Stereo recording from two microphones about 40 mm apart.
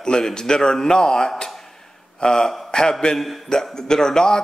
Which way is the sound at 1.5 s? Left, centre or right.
Centre.